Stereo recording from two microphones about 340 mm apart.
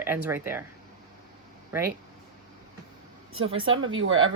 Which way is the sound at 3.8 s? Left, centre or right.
Right.